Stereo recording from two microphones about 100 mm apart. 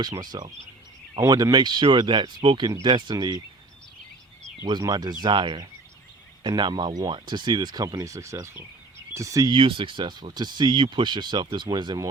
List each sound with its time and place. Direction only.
0.2 s speech: 40° right (ahead or behind)
4.7 s speech: 40° right (ahead or behind)
5.2 s speech: 50° right (ahead or behind); by 9.5 s 35° right (ahead or behind)
9.5 s speech: 60° right (ahead or behind); by 12.0 s 40° right (ahead or behind)